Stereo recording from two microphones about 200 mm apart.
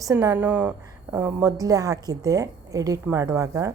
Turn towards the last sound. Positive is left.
turn(degrees=-15)  # may be behind; listen again after turning